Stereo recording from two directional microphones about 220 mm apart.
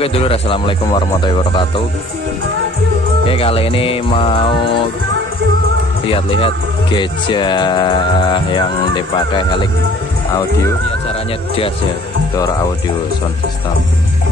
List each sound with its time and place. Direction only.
0.0 s speech: 25° left (ahead or behind)
3.3 s speech: 25° left (ahead or behind)
6.0 s speech: 25° left (ahead or behind)